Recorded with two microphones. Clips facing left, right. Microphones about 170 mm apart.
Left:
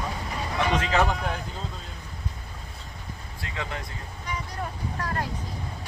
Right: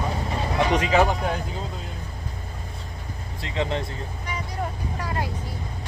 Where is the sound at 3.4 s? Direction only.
25° right (ahead or behind).